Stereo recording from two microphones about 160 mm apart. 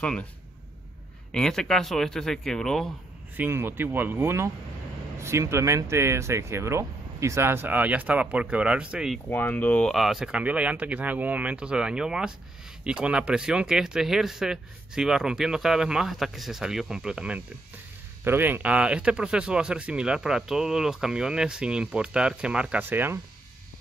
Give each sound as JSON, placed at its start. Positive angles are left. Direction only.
{"t": 0.0, "sound": "speech", "side_deg": 5}
{"t": 1.3, "sound": "speech", "side_deg": 5}
{"t": 3.3, "sound": "speech", "side_deg": -15}
{"t": 9.3, "sound": "speech", "side_deg": 10}